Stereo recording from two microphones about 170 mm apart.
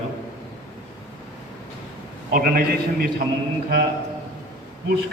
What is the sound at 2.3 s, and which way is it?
Speech, 60° right (ahead or behind).